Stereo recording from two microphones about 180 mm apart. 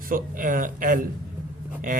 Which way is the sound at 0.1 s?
50° right (ahead or behind).